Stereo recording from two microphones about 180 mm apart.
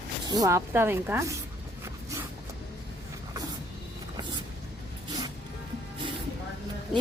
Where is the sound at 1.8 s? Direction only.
15° right (ahead or behind).